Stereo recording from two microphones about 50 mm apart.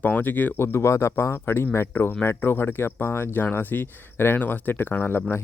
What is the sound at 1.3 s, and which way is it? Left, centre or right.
Speech, left.